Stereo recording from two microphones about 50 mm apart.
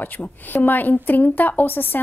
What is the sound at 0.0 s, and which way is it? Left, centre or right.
A woman's voice, left.